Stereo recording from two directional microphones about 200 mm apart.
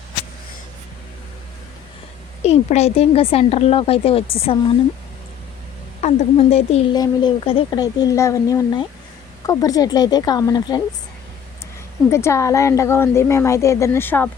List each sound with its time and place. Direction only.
2.4 s speech: 30° left (ahead or behind)
6.0 s speech: 35° left (ahead or behind)
6.9 s speech: 20° left (ahead or behind)
12.1 s a woman's voice: 15° left (ahead or behind)